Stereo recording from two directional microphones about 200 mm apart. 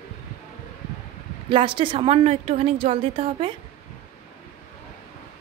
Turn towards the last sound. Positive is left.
turn(degrees=-30)  # may be behind; listen again after turning